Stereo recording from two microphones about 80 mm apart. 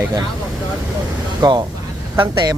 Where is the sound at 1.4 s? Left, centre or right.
Right.